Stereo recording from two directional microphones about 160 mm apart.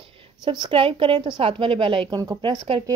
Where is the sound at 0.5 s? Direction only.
30° right (ahead or behind).